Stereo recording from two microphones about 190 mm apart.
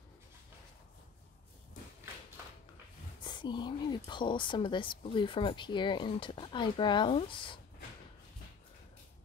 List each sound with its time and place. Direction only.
3.3 s a woman's voice: 25° left (ahead or behind)